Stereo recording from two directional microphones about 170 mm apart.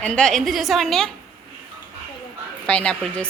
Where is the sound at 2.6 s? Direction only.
5° left (ahead or behind).